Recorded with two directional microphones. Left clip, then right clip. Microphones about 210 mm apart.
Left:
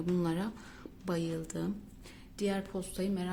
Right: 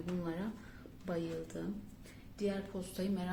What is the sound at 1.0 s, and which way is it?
A woman's voice, 40° left (ahead or behind).